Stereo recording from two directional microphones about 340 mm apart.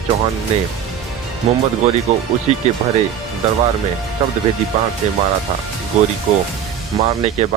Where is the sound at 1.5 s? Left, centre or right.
Centre.